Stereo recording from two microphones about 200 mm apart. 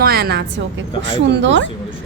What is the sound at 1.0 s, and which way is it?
Speech, 65° right (ahead or behind).